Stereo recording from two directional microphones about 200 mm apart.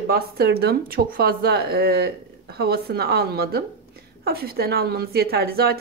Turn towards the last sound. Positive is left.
turn(degrees=-50)  # may be behind; listen again after turning